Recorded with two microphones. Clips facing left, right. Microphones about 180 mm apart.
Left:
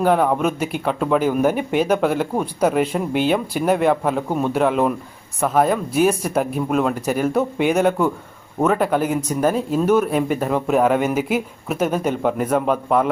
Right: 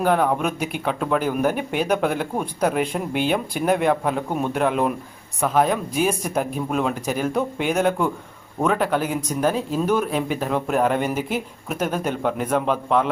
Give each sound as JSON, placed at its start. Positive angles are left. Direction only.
{"t": 0.0, "sound": "speech", "side_deg": 5}